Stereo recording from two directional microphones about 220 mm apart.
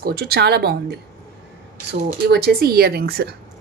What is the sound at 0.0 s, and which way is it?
Speech, 45° right (ahead or behind).